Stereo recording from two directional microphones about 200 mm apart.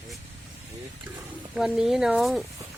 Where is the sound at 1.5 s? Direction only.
Centre (ahead or behind).